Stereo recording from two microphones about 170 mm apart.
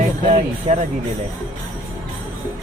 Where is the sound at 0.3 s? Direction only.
40° right (ahead or behind).